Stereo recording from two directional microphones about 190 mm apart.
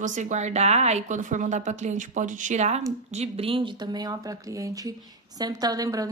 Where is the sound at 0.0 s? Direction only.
40° right (ahead or behind).